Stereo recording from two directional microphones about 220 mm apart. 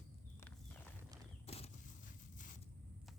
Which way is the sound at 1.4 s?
30° left (ahead or behind).